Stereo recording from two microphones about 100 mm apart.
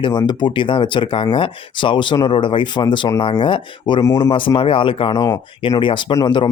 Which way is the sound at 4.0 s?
40° left (ahead or behind).